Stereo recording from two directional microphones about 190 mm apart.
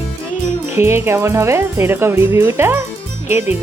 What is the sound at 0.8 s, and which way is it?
Speech, 15° right (ahead or behind).